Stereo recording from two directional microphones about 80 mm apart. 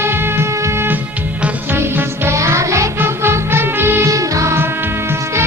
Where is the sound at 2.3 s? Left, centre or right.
Right.